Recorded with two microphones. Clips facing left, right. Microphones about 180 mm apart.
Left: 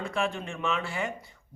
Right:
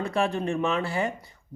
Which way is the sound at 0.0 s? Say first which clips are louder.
Right 5 dB; 35° right (ahead or behind).